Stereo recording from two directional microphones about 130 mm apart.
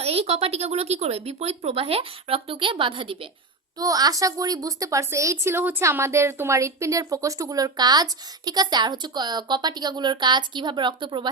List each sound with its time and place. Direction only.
0.0 s speech: 50° right (ahead or behind)
3.8 s a woman's voice: 30° right (ahead or behind)